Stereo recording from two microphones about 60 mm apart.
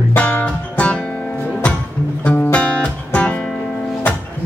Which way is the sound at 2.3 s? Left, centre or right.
Left.